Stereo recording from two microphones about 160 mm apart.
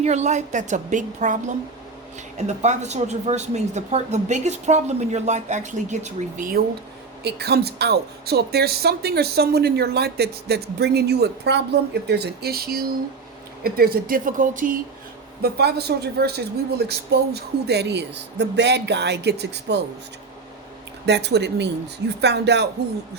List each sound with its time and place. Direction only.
0.0 s speech: 45° right (ahead or behind)
2.6 s speech: 45° right (ahead or behind); by 6.7 s 60° right (ahead or behind)
7.3 s speech: 90° right; by 14.8 s 55° right (ahead or behind)
15.4 s speech: 85° right
21.1 s speech: 90° right